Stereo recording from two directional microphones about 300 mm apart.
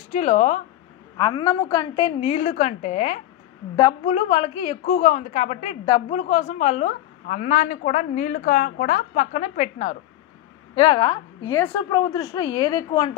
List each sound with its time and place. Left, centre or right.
0.1 s a woman's voice: left